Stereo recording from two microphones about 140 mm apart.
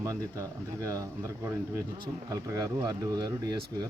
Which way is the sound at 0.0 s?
25° right (ahead or behind).